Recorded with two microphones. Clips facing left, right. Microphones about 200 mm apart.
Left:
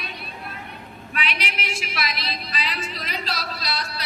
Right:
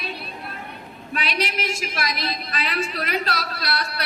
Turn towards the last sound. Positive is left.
turn(degrees=-60)  # may be behind; listen again after turning